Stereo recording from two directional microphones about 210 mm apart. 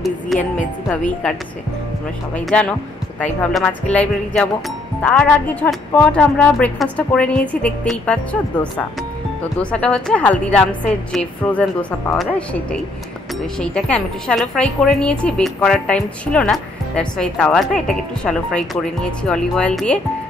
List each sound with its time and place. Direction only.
0.0 s a woman's voice: centre (ahead or behind)
2.3 s a woman's voice: 5° left (ahead or behind)
9.6 s a woman's voice: 5° left (ahead or behind)